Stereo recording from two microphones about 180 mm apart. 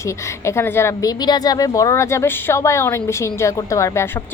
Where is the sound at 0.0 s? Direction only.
15° left (ahead or behind).